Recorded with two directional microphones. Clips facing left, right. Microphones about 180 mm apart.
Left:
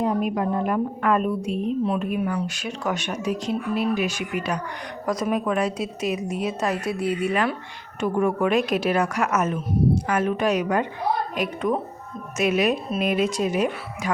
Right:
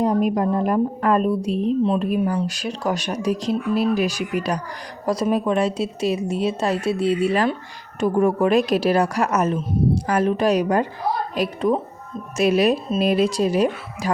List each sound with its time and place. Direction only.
0.0 s a woman's voice: 40° right (ahead or behind)